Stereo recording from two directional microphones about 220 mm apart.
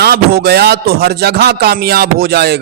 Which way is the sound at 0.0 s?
45° right (ahead or behind).